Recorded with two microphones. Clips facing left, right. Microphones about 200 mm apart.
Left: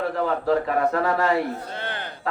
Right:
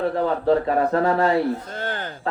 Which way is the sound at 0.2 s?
35° right (ahead or behind).